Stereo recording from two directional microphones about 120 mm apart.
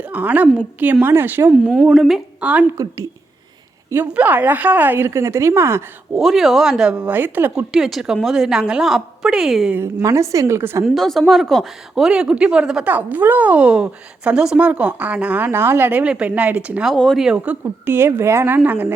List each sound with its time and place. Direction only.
0.0 s a woman's voice: 15° right (ahead or behind)
1.9 s a woman's voice: centre (ahead or behind)
2.7 s a woman's voice: 30° right (ahead or behind)
3.8 s a woman's voice: 15° right (ahead or behind)
6.1 s a woman's voice: centre (ahead or behind)
7.7 s a woman's voice: centre (ahead or behind)
9.7 s a woman's voice: 25° right (ahead or behind)
10.8 s speech: centre (ahead or behind)
16.9 s a woman's voice: 5° left (ahead or behind)
17.2 s speech: 10° right (ahead or behind)